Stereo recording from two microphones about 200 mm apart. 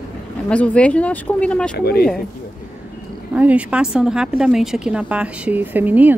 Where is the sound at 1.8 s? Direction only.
50° left (ahead or behind).